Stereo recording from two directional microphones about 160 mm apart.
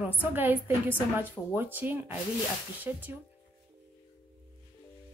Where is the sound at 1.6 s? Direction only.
10° right (ahead or behind).